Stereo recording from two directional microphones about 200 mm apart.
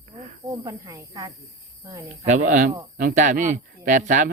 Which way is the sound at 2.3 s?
40° right (ahead or behind).